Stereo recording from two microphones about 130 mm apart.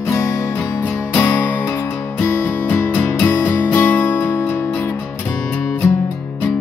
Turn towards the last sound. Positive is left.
turn(degrees=15)  # may be behind; listen again after turning